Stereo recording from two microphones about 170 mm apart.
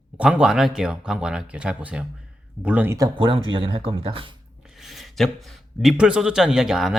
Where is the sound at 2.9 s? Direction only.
25° right (ahead or behind).